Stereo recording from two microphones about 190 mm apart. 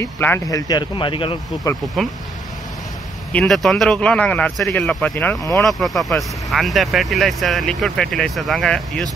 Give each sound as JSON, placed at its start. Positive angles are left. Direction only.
{"t": 0.0, "sound": "speech", "side_deg": 10}
{"t": 3.3, "sound": "speech", "side_deg": 0}